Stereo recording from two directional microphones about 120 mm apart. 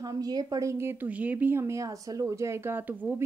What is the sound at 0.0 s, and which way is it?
Speech, 30° right (ahead or behind).